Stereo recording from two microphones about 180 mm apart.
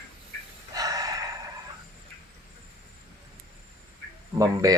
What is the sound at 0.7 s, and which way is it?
Gasp, 20° right (ahead or behind).